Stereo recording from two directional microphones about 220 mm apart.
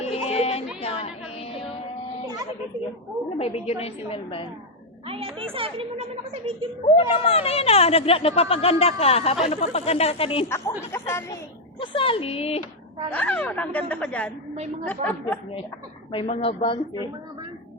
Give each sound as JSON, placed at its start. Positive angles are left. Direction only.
{"t": 0.0, "sound": "music", "side_deg": 25}
{"t": 0.8, "sound": "a sound", "side_deg": 25}
{"t": 3.3, "sound": "speech", "side_deg": 30}
{"t": 5.0, "sound": "speech", "side_deg": -25}
{"t": 6.8, "sound": "speech", "side_deg": 25}
{"t": 10.9, "sound": "a woman's voice", "side_deg": 10}
{"t": 11.8, "sound": "speech", "side_deg": 25}
{"t": 13.1, "sound": "a woman's voice", "side_deg": 5}
{"t": 16.1, "sound": "speech", "side_deg": 25}